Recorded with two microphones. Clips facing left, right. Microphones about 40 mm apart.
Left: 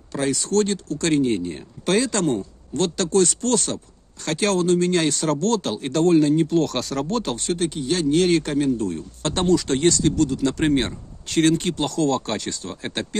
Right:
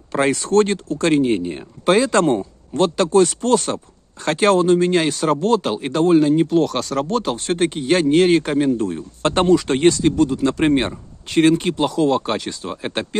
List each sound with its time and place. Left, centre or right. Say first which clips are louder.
0.1 s speech: right 5 dB; right; by 3.7 s centre
3.7 s speech: right 4 dB; right; by 7.4 s centre
7.4 s speech: right 5 dB; right